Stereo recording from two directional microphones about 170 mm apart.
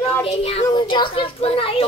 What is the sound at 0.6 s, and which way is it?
Speech, 25° left (ahead or behind).